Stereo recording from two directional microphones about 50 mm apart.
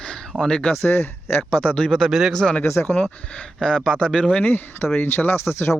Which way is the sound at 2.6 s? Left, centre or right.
Left.